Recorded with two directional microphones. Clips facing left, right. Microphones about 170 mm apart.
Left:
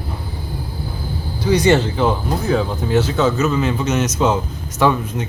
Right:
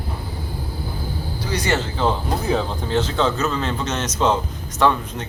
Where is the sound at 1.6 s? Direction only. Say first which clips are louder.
Left 4 dB; 20° left (ahead or behind).